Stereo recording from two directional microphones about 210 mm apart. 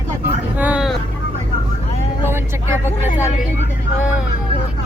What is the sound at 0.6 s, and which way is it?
Vehicle, 5° right (ahead or behind).